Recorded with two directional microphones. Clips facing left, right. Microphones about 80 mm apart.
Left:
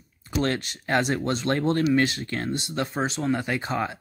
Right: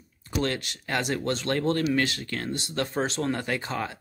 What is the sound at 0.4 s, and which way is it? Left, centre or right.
Speech, left.